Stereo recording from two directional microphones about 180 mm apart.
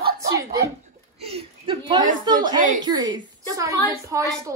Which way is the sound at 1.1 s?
35° right (ahead or behind).